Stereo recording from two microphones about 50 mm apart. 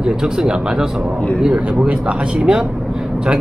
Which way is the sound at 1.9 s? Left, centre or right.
Centre.